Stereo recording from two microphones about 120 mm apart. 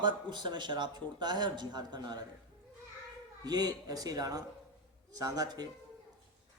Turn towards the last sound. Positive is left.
turn(degrees=-35)  # may be behind; listen again after turning